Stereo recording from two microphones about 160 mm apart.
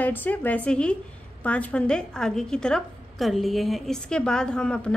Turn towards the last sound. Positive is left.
turn(degrees=5)  # may be behind; listen again after turning